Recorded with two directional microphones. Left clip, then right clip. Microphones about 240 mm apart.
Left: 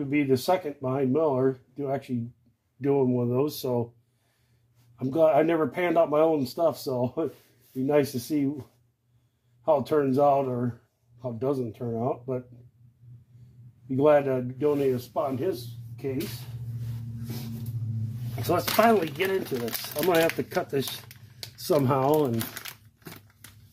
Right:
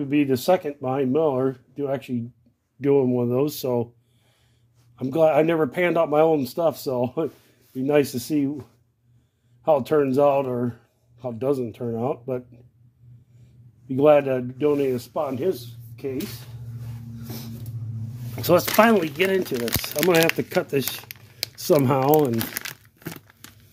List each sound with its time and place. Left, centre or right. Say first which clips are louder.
0.1 s speech: right 4 dB; right
4.9 s speech: right 3 dB; right
9.7 s speech: right 4 dB; right
13.9 s speech: right 4 dB; right
18.5 s speech: right 5 dB; right